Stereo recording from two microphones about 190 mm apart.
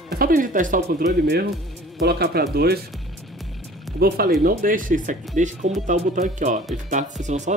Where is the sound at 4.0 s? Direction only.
55° right (ahead or behind); by 7.5 s 40° right (ahead or behind).